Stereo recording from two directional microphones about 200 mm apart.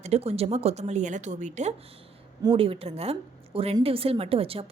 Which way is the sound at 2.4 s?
25° right (ahead or behind).